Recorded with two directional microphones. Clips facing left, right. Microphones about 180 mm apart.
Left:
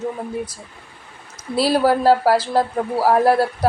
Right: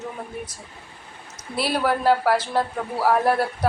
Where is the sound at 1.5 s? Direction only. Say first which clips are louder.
Left 6 dB; 35° left (ahead or behind).